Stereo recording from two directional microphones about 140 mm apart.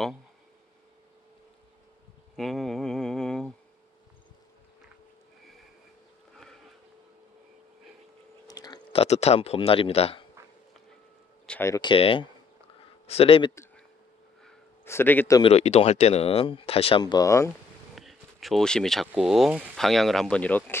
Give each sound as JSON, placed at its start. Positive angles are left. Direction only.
{"t": 2.3, "sound": "a sound", "side_deg": 0}
{"t": 8.5, "sound": "chewing", "side_deg": 25}
{"t": 8.9, "sound": "speech", "side_deg": 50}
{"t": 11.5, "sound": "speech", "side_deg": 5}
{"t": 11.8, "sound": "speech", "side_deg": 40}
{"t": 14.9, "sound": "speech", "side_deg": 15}
{"t": 15.4, "sound": "speech", "side_deg": 50}
{"t": 17.0, "sound": "speech", "side_deg": 25}
{"t": 17.9, "sound": "speech", "side_deg": 0}